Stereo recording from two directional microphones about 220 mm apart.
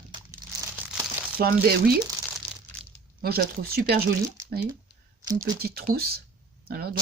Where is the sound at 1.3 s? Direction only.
45° right (ahead or behind).